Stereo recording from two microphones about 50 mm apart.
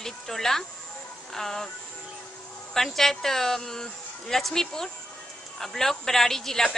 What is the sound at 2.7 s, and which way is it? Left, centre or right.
Speech, centre.